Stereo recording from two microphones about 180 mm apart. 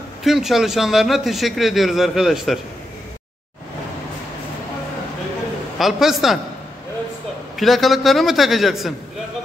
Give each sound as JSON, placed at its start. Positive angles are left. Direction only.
{"t": 0.2, "sound": "a man's voice", "side_deg": 0}
{"t": 5.8, "sound": "a man's voice", "side_deg": 0}
{"t": 7.5, "sound": "a man's voice", "side_deg": 0}